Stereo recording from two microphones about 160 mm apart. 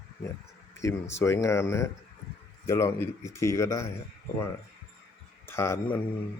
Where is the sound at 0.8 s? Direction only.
20° left (ahead or behind).